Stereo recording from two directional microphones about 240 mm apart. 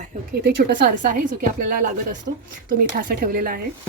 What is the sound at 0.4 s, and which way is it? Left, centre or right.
Speech, right.